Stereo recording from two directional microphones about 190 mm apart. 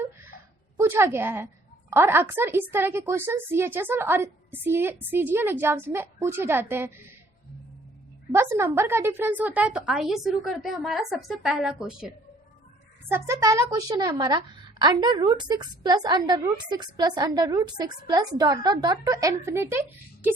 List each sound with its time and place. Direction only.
0.8 s a woman's voice: 10° right (ahead or behind)
8.3 s a woman's voice: 15° right (ahead or behind)
13.1 s a woman's voice: 15° right (ahead or behind)